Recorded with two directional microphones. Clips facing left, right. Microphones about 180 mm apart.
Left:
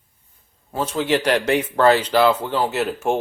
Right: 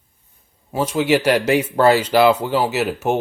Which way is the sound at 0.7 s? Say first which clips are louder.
Right 3 dB; 10° right (ahead or behind).